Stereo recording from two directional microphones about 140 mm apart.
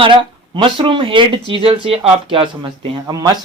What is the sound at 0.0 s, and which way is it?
Speech, 35° right (ahead or behind).